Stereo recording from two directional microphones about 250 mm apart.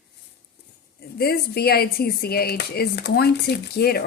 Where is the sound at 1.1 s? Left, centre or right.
Left.